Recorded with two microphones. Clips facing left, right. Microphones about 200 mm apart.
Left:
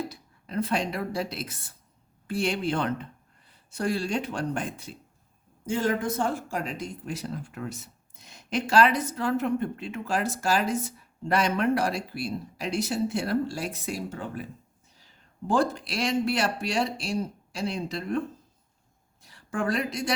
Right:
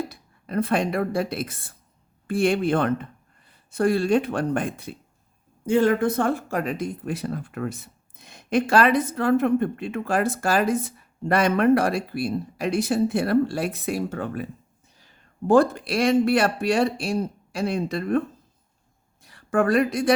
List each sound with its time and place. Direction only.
0.0 s speech: 55° right (ahead or behind)
19.2 s speech: 55° right (ahead or behind)